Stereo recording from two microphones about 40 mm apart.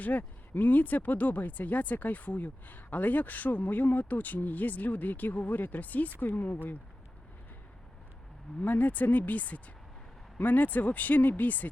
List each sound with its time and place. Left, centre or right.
0.0 s speech: left
8.6 s speech: left